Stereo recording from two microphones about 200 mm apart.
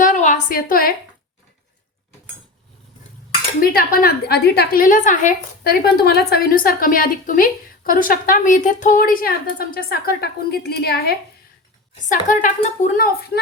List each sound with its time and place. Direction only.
0.0 s a woman's voice: 40° left (ahead or behind)
3.6 s a woman's voice: 50° left (ahead or behind)
12.0 s a woman's voice: 40° left (ahead or behind)
13.0 s a woman's voice: 50° left (ahead or behind)